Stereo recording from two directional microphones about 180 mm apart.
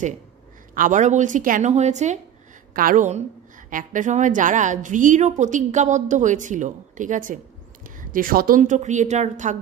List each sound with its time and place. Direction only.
0.7 s speech: 45° right (ahead or behind)
2.7 s a woman's voice: 50° right (ahead or behind)